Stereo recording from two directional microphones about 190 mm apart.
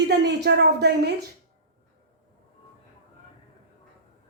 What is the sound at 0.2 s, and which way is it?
Speech, 60° right (ahead or behind).